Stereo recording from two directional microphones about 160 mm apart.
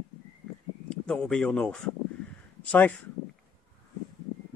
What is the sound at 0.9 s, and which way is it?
Speech, 5° left (ahead or behind).